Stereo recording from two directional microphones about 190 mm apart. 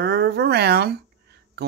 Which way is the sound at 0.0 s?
60° right (ahead or behind).